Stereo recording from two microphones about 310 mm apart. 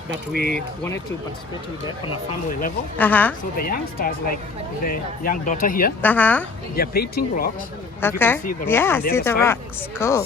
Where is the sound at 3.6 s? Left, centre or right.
Left.